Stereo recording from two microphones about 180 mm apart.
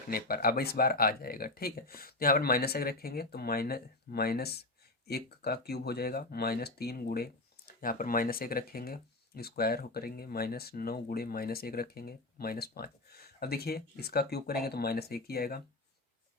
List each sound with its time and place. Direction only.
0.1 s speech: 55° left (ahead or behind)